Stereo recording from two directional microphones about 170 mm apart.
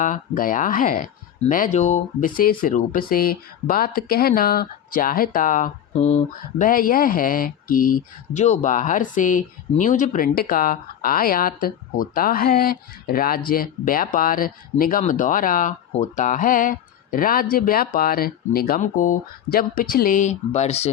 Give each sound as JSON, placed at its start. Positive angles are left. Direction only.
{"t": 0.0, "sound": "speech", "side_deg": 50}